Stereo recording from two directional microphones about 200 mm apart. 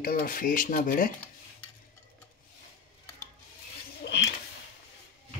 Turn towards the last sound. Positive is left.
turn(degrees=60)  # may be behind; listen again after turning